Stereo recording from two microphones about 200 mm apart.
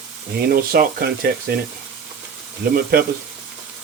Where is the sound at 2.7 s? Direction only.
45° right (ahead or behind).